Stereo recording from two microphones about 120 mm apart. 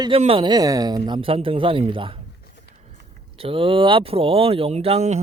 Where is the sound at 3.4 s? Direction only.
50° right (ahead or behind); by 5.2 s 65° right (ahead or behind).